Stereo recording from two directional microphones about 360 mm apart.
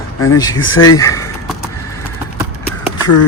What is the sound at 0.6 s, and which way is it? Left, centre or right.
Speech, left.